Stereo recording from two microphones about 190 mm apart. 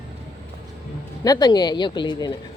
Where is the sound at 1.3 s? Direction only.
20° left (ahead or behind).